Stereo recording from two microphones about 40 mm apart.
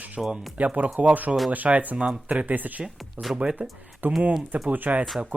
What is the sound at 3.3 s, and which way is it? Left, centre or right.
Speech, right.